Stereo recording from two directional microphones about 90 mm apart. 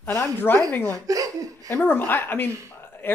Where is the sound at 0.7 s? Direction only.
20° left (ahead or behind).